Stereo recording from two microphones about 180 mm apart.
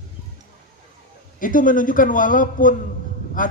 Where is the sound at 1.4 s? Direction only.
50° left (ahead or behind).